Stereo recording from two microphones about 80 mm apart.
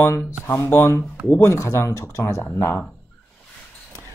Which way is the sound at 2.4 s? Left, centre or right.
Left.